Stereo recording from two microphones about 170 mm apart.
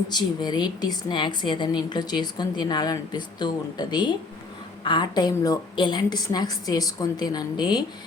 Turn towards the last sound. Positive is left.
turn(degrees=25)  # may be behind; listen again after turning